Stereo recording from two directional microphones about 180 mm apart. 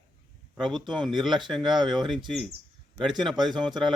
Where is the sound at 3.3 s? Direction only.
25° right (ahead or behind).